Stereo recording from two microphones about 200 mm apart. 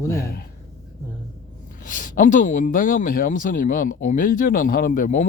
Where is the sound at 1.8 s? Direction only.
40° left (ahead or behind).